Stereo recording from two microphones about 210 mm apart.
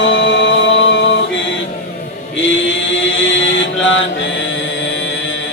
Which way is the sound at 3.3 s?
60° left (ahead or behind).